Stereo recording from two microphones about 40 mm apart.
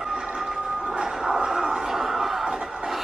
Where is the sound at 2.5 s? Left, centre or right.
Right.